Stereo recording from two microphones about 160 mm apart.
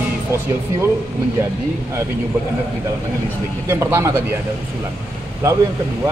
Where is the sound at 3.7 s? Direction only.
15° right (ahead or behind).